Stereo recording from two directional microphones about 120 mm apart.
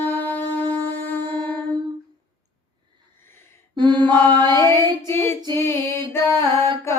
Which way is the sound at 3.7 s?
40° right (ahead or behind).